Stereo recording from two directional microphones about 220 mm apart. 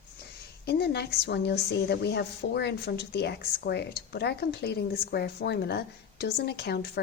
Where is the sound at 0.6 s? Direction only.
45° left (ahead or behind).